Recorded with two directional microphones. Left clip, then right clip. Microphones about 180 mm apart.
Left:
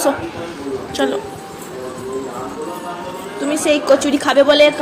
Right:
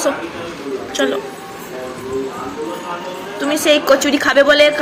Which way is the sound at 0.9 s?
20° left (ahead or behind).